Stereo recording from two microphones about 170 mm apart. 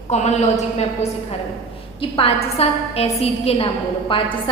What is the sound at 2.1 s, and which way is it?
A woman's voice, 35° left (ahead or behind).